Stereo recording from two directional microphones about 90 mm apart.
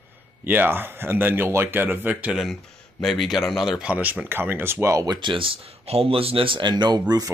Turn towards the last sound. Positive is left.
turn(degrees=-55)  # may be behind; listen again after turning